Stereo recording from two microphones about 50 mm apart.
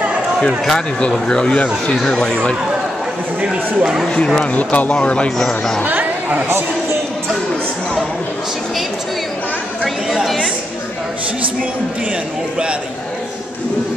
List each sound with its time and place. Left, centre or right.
0.7 s speech: centre
3.4 s speech: centre
4.6 s speech: left
5.9 s chatter: right
10.1 s a woman's voice: centre